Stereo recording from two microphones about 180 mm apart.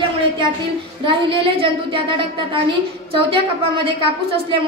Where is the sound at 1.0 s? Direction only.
30° right (ahead or behind).